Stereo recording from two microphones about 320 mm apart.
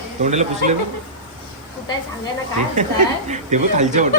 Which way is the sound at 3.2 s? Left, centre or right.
Right.